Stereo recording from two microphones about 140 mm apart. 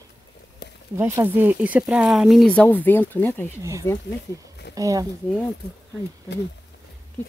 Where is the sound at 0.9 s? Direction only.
15° right (ahead or behind).